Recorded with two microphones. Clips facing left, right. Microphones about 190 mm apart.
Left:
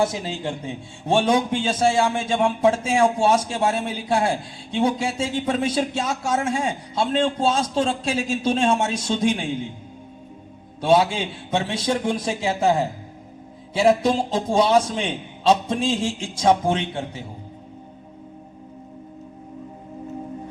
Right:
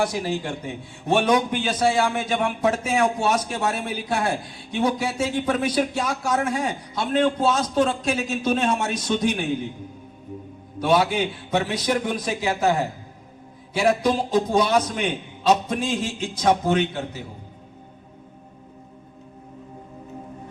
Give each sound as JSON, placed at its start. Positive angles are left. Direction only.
{"t": 0.0, "sound": "a man's voice", "side_deg": 25}
{"t": 10.8, "sound": "a man's voice", "side_deg": 25}